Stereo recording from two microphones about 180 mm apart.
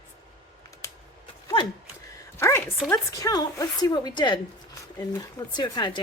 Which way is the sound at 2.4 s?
15° left (ahead or behind).